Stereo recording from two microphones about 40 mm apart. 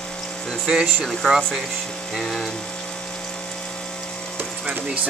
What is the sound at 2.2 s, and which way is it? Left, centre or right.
Speech, centre.